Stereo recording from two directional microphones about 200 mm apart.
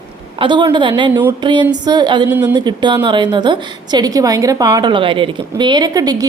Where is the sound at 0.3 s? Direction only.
25° right (ahead or behind).